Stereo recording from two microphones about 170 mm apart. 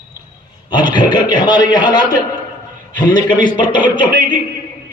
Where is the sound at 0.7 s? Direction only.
25° left (ahead or behind).